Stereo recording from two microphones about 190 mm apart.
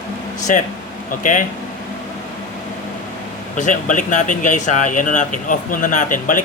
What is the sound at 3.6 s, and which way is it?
A man's voice, 40° left (ahead or behind).